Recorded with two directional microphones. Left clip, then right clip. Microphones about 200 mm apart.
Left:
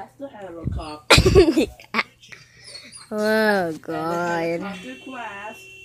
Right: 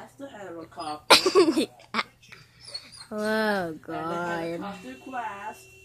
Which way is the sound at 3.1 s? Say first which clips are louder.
Left 7 dB; 5° left (ahead or behind).